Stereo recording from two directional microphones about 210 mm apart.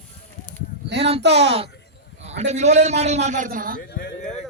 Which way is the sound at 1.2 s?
55° right (ahead or behind).